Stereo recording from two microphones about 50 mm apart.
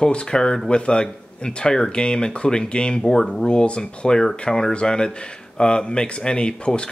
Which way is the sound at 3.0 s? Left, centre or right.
Centre.